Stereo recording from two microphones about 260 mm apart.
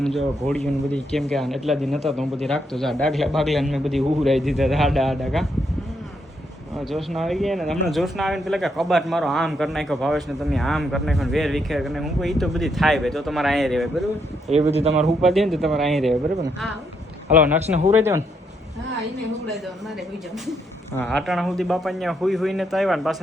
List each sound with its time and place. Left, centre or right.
0.0 s speech: centre
6.7 s speech: centre
14.5 s speech: right
15.2 s speech: centre
17.3 s speech: centre
17.6 s speech: right
17.9 s speech: centre
21.0 s speech: centre